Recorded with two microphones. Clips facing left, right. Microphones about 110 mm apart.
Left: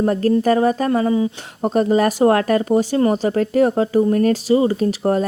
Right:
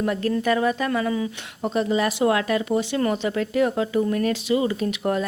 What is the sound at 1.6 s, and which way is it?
Speech, 45° left (ahead or behind).